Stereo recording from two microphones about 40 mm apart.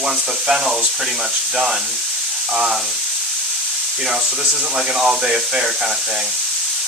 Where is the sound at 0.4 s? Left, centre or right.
Centre.